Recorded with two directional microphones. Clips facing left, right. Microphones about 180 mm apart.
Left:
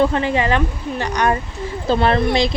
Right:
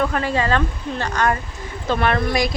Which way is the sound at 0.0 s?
20° left (ahead or behind).